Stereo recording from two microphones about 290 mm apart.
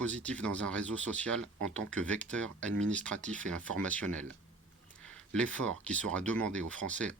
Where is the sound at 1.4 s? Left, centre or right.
Right.